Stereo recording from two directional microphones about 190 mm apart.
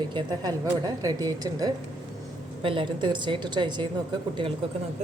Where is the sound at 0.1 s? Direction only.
25° right (ahead or behind).